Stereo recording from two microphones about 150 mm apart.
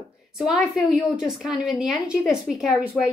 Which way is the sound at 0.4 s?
5° right (ahead or behind).